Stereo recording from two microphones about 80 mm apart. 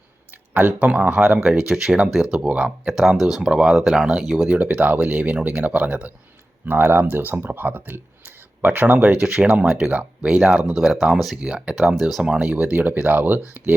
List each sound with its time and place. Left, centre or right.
0.5 s speech: centre
12.5 s speech: centre